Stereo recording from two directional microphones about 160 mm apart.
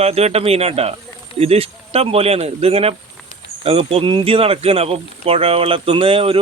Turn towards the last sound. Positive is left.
turn(degrees=-35)  # may be behind; listen again after turning